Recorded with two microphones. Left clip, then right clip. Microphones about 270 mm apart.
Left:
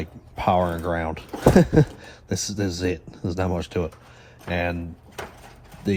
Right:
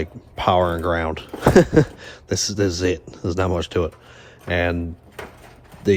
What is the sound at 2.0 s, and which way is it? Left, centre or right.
Speech, right.